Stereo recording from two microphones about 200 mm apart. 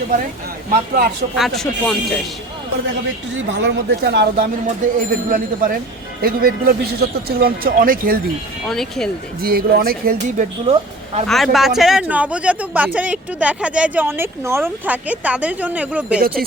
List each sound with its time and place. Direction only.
1.4 s speech: centre (ahead or behind)
3.3 s speech: 70° right (ahead or behind); by 8.2 s 45° right (ahead or behind)
8.6 s speech: centre (ahead or behind)
9.4 s speech: 50° right (ahead or behind)
10.7 s speech: 30° right (ahead or behind)
11.3 s speech: centre (ahead or behind)